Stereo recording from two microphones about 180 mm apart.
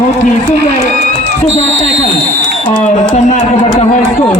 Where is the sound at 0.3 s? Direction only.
40° left (ahead or behind).